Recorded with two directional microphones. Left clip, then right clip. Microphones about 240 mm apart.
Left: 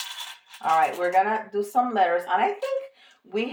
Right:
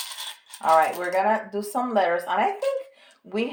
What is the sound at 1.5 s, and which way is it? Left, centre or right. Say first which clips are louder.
Speech: left 1 dB; right.